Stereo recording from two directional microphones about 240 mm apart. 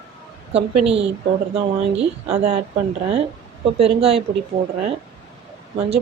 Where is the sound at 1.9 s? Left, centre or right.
Right.